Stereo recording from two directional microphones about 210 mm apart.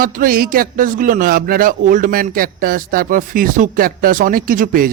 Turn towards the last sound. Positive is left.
turn(degrees=-40)  # may be behind; listen again after turning